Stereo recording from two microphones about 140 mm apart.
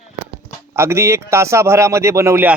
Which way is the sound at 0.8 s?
20° right (ahead or behind).